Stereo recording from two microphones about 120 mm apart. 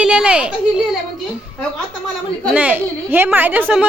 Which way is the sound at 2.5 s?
15° right (ahead or behind).